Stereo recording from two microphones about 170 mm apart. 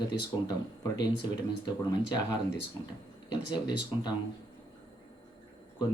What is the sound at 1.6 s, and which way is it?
Speech, 20° left (ahead or behind).